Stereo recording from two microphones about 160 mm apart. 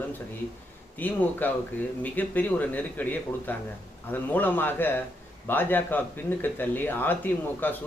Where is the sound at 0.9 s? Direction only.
10° left (ahead or behind).